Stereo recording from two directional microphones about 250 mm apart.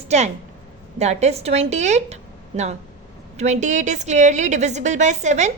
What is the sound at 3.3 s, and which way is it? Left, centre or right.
A woman's voice, right.